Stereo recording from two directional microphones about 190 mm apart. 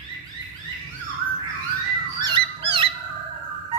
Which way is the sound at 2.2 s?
25° right (ahead or behind).